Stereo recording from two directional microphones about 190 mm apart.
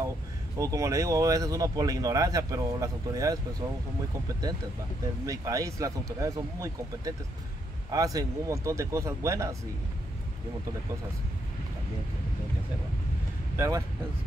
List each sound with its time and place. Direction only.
0.6 s speech: 15° right (ahead or behind)
5.2 s speech: 15° right (ahead or behind)
13.6 s speech: 20° right (ahead or behind)